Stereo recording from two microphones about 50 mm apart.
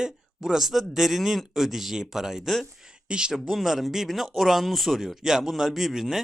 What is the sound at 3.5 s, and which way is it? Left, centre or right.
Speech, centre.